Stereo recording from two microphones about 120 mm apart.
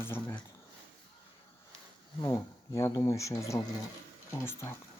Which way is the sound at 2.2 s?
25° left (ahead or behind).